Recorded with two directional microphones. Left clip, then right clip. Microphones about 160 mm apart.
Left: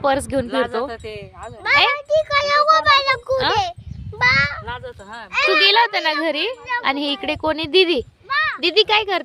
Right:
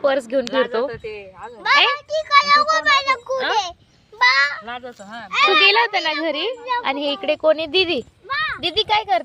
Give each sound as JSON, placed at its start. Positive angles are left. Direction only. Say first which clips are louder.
{"t": 0.0, "sound": "a child's voice", "louder": "even", "side_deg": 15}
{"t": 0.9, "sound": "speech", "louder": "right 1 dB", "side_deg": 60}
{"t": 1.6, "sound": "a child's voice", "louder": "even", "side_deg": 5}
{"t": 4.6, "sound": "speech", "louder": "left 1 dB", "side_deg": 45}
{"t": 5.3, "sound": "a child's voice", "louder": "right 1 dB", "side_deg": 10}
{"t": 8.3, "sound": "a sound", "louder": "left 3 dB", "side_deg": 0}
{"t": 8.6, "sound": "speech", "louder": "left 3 dB", "side_deg": 25}